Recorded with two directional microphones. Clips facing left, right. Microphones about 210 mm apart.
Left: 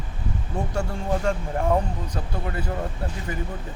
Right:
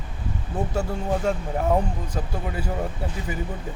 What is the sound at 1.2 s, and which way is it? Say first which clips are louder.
Speech: even; 5° right (ahead or behind).